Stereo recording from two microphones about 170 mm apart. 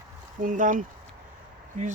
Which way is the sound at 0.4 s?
50° right (ahead or behind).